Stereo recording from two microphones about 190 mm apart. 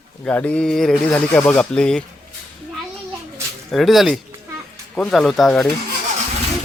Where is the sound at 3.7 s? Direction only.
Centre (ahead or behind).